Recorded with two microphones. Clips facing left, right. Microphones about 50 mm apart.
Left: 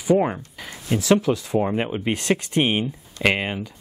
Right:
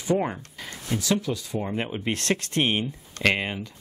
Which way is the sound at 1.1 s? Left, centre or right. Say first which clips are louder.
Left 9 dB; left.